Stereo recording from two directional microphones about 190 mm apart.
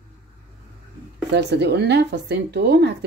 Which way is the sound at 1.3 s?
65° right (ahead or behind).